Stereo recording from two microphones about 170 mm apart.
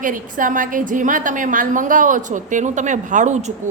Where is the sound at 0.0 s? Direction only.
50° right (ahead or behind).